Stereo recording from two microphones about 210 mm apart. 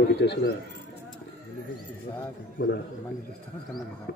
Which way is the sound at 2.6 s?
45° left (ahead or behind).